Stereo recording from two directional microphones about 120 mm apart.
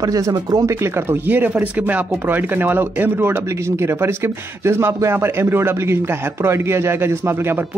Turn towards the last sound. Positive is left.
turn(degrees=-20)  # may be behind; listen again after turning